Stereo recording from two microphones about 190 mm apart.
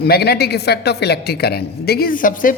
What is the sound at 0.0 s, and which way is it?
A woman's voice, 60° left (ahead or behind).